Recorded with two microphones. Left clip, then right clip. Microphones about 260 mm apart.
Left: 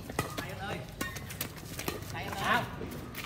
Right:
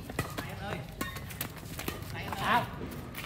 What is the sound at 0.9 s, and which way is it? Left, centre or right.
Music, centre.